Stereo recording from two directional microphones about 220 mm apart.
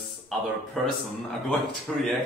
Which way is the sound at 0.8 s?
Centre (ahead or behind).